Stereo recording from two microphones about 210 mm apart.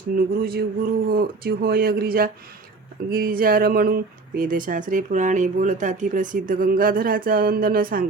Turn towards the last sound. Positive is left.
turn(degrees=-45)  # may be behind; listen again after turning